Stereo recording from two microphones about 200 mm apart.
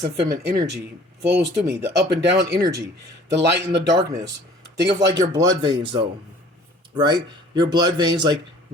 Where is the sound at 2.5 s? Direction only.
15° right (ahead or behind).